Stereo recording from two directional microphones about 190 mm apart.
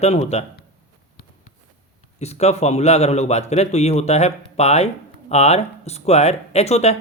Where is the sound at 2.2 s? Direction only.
35° left (ahead or behind).